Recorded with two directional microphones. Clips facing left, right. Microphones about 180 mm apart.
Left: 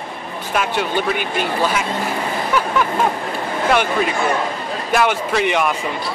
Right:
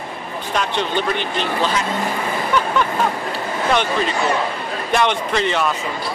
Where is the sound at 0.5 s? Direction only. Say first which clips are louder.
Left 1 dB; 10° left (ahead or behind).